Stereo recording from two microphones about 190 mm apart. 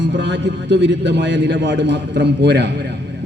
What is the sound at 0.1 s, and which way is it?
A man's voice, 70° right (ahead or behind).